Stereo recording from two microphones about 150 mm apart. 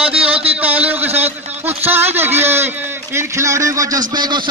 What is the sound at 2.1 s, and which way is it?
A man's voice, 15° right (ahead or behind).